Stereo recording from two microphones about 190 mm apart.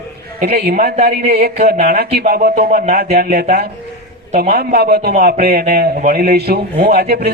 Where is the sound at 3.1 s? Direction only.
55° right (ahead or behind).